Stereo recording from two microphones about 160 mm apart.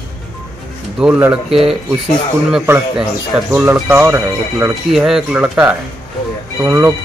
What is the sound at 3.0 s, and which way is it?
Speech, 5° right (ahead or behind).